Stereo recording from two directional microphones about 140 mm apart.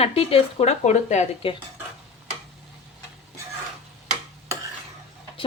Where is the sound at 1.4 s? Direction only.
40° left (ahead or behind).